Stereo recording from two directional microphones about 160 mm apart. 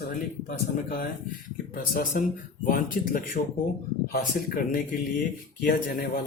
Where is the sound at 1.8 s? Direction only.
60° left (ahead or behind).